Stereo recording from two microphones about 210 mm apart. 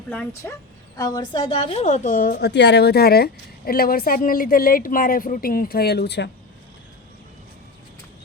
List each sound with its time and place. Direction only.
0.1 s a woman's voice: 10° left (ahead or behind); by 6.3 s 55° left (ahead or behind)